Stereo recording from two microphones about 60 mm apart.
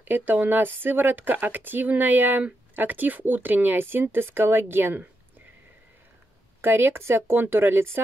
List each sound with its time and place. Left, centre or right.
0.0 s speech: right
6.6 s speech: right